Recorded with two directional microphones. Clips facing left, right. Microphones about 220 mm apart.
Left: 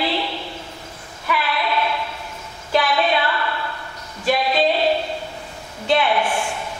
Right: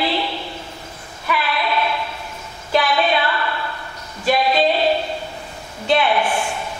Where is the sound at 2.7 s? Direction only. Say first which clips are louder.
Right 1 dB; 15° right (ahead or behind).